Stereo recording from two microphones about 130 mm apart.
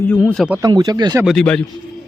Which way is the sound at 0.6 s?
30° right (ahead or behind).